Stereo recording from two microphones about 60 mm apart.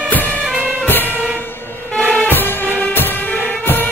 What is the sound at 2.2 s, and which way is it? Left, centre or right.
Music, left.